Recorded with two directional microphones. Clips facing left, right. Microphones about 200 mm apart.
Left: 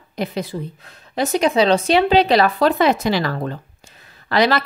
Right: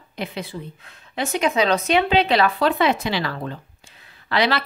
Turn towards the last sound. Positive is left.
turn(degrees=40)  # may be behind; listen again after turning